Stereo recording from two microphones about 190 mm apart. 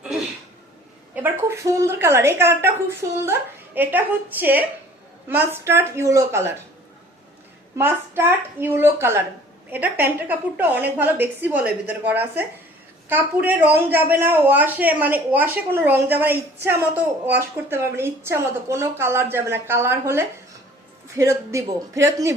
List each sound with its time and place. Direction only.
1.1 s a man's voice: 10° right (ahead or behind)
7.8 s a man's voice: 10° right (ahead or behind)